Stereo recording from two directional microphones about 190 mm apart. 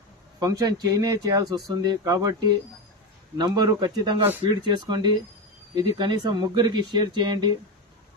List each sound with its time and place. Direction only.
0.3 s speech: 20° right (ahead or behind)